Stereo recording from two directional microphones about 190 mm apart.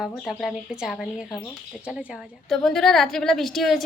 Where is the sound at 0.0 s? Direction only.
Centre (ahead or behind).